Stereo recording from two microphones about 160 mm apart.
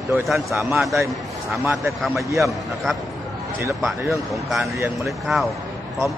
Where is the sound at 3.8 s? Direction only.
Centre (ahead or behind).